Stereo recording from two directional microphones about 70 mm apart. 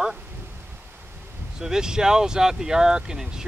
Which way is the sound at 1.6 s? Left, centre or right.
Centre.